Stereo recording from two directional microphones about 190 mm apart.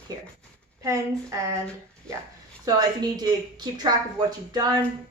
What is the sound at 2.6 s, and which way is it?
A woman's voice, 20° right (ahead or behind).